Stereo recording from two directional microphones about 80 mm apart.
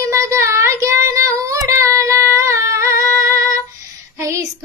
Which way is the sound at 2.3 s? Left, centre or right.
Right.